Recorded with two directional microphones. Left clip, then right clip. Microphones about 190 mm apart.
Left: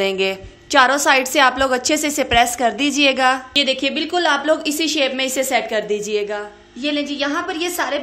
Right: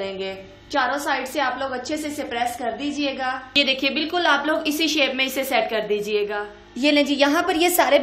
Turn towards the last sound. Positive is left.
turn(degrees=-15)  # may be behind; listen again after turning